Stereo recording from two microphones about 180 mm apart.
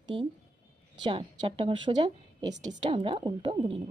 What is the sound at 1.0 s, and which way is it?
Speech, 30° right (ahead or behind).